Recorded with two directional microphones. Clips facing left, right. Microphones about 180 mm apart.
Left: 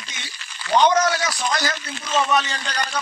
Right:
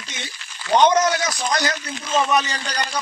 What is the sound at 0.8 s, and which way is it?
A man's voice, 20° right (ahead or behind).